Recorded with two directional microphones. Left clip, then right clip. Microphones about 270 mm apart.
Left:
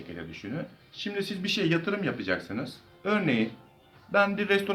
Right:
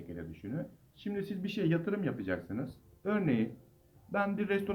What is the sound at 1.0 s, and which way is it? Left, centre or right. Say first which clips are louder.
Speech: left 7 dB; centre.